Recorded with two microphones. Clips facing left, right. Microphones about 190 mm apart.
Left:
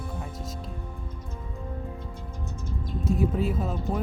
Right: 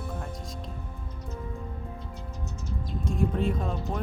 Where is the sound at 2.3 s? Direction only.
55° left (ahead or behind).